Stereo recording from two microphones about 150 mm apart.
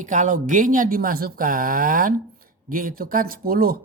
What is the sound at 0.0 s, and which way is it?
A man's voice, 55° right (ahead or behind).